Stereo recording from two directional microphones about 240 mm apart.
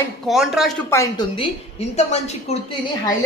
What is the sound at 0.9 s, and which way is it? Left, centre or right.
A woman's voice, centre.